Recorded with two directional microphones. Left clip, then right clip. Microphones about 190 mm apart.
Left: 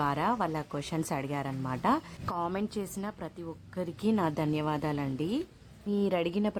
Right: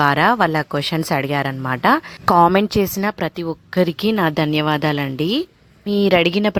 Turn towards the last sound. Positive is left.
turn(degrees=-30)  # may be behind; listen again after turning